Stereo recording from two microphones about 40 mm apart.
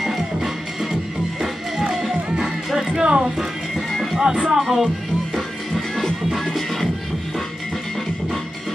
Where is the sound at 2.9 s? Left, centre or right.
Right.